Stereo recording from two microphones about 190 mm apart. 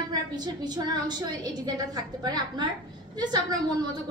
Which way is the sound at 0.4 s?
20° right (ahead or behind).